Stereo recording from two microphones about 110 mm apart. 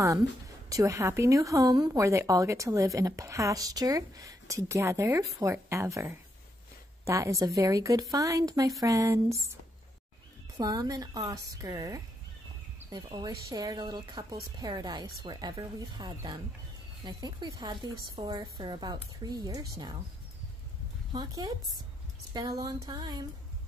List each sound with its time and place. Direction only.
0.7 s a woman's voice: 30° right (ahead or behind)
10.6 s a woman's voice: 35° right (ahead or behind)
14.6 s a woman's voice: 35° right (ahead or behind)
21.1 s a woman's voice: 35° right (ahead or behind)